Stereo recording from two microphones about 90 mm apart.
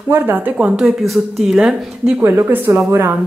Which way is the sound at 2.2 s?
25° right (ahead or behind).